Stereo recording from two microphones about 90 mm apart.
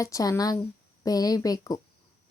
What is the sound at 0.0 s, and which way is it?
A woman's voice, 40° left (ahead or behind).